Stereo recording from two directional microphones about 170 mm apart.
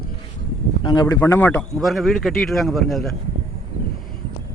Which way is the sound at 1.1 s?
15° left (ahead or behind).